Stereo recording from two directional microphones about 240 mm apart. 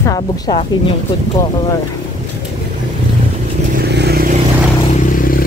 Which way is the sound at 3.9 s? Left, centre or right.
Right.